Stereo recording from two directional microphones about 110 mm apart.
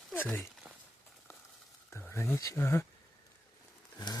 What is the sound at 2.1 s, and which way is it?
Speech, 25° left (ahead or behind).